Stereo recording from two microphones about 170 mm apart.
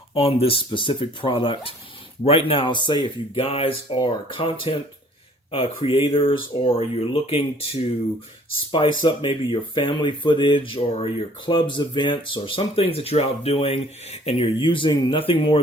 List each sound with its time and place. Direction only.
0.1 s speech: 35° left (ahead or behind)